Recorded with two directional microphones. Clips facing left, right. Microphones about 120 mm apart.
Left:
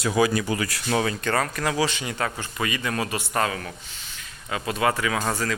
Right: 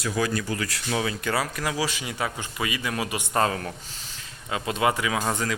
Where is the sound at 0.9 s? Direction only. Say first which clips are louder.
Left 3 dB; 5° right (ahead or behind).